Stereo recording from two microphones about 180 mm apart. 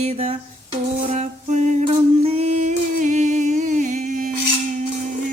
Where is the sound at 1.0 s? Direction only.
35° right (ahead or behind).